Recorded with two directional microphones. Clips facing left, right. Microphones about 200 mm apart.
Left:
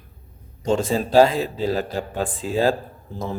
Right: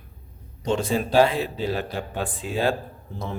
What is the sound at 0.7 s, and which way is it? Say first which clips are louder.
A man's voice: left 3 dB; 40° left (ahead or behind).